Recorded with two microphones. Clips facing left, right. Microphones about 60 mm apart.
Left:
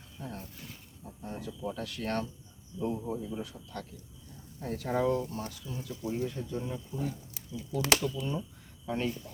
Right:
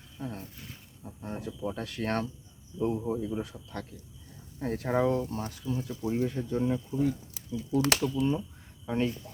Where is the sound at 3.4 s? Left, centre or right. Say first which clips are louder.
Right 2 dB; right.